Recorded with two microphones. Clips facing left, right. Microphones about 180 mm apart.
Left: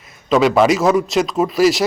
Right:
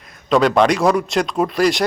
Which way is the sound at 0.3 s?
5° left (ahead or behind).